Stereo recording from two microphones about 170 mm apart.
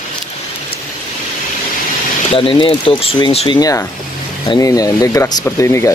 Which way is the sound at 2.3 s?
35° left (ahead or behind).